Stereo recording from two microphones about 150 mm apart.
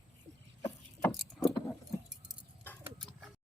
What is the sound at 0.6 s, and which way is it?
Vehicle, 20° left (ahead or behind).